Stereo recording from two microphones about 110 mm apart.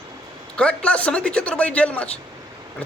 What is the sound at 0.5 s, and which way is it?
A man's voice, 10° left (ahead or behind).